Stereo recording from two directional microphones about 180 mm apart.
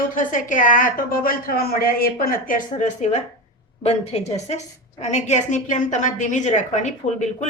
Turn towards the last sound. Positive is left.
turn(degrees=40)  # may be behind; listen again after turning